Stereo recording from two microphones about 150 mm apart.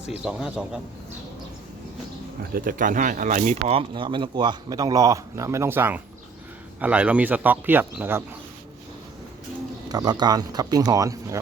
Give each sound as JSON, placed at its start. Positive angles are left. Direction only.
{"t": 0.3, "sound": "speech", "side_deg": -5}
{"t": 2.4, "sound": "speech", "side_deg": -70}
{"t": 9.9, "sound": "speech", "side_deg": -25}